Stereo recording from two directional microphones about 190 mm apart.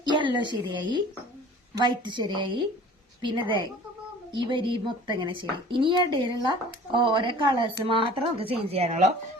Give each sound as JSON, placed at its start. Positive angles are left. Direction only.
{"t": 0.0, "sound": "a woman's voice", "side_deg": -25}